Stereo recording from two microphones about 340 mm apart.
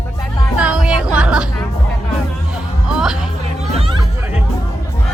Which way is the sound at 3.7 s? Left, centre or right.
Centre.